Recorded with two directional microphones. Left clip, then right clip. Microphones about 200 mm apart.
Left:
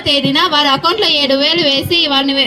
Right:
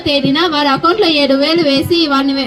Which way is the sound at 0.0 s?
50° right (ahead or behind).